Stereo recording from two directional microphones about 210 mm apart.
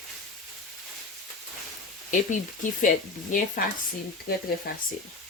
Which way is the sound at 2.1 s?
35° left (ahead or behind).